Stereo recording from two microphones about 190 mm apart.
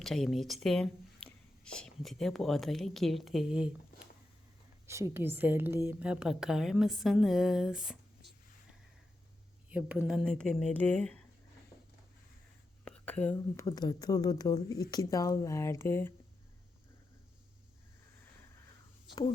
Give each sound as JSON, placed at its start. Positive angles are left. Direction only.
{"t": 0.0, "sound": "a woman's voice", "side_deg": 0}
{"t": 9.6, "sound": "a woman's voice", "side_deg": -5}
{"t": 12.8, "sound": "whispering", "side_deg": 5}
{"t": 13.3, "sound": "speech", "side_deg": 20}